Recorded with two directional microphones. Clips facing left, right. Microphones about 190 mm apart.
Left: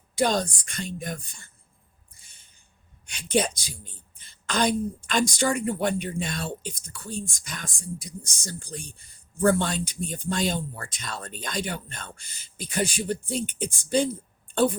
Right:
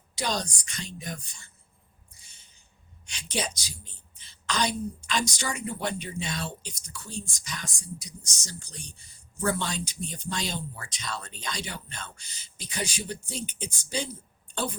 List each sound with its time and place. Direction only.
0.2 s a woman's voice: 50° left (ahead or behind)
3.1 s a woman's voice: 55° left (ahead or behind)